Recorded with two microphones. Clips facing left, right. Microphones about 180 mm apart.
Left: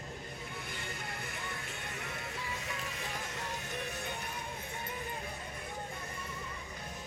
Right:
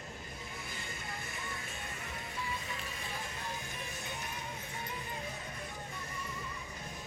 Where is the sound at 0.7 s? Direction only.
60° left (ahead or behind).